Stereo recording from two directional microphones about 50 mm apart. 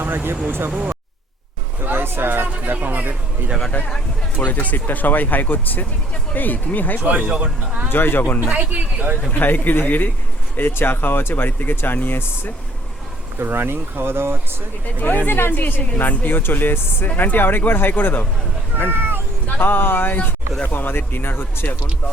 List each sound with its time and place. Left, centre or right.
0.0 s speech: right
0.7 s speech: right
1.8 s speech: right
2.7 s speech: right
3.7 s speech: left
7.0 s speech: right
7.9 s speech: left
8.5 s speech: right
9.3 s speech: left
13.4 s speech: right
14.9 s speech: left
15.3 s speech: left
18.9 s speech: right
19.5 s speech: left